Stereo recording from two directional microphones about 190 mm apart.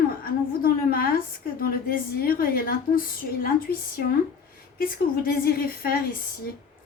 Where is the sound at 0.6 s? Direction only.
50° left (ahead or behind).